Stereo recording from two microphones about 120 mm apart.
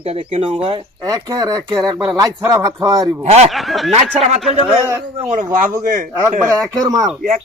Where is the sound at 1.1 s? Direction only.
30° right (ahead or behind).